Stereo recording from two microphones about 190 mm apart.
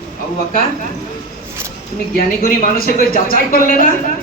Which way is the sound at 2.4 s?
50° left (ahead or behind).